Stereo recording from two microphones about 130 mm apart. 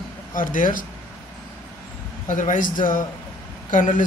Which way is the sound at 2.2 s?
80° left.